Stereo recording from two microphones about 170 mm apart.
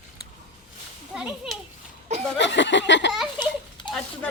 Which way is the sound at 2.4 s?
90° left.